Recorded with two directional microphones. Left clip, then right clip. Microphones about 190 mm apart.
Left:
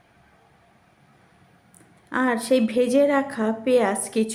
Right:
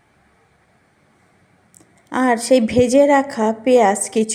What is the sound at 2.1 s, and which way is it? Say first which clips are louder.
A woman's voice: right 6 dB; 25° right (ahead or behind).